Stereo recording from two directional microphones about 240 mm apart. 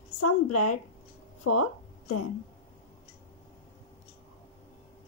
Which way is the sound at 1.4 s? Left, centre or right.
Left.